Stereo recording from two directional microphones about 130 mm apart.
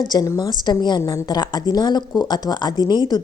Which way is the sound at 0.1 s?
30° left (ahead or behind).